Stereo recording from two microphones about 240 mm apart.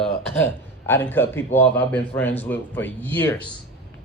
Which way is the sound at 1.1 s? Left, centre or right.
Centre.